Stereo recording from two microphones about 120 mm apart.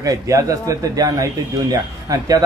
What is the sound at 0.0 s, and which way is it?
Speech, 30° right (ahead or behind).